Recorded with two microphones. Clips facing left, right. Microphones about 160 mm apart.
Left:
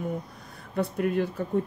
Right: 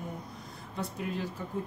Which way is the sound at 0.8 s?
60° left (ahead or behind).